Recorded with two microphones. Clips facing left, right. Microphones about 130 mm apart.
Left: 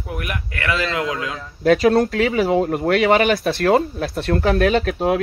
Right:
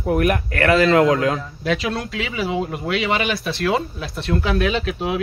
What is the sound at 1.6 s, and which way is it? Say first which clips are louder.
Speech: left 14 dB; 45° left (ahead or behind).